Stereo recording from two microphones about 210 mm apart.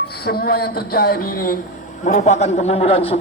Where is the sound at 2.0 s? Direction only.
35° left (ahead or behind).